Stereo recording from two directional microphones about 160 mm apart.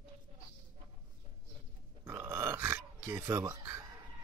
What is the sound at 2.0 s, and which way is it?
Burping, 15° right (ahead or behind).